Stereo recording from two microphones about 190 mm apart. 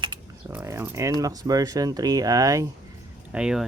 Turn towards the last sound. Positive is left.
turn(degrees=-5)  # may be behind; listen again after turning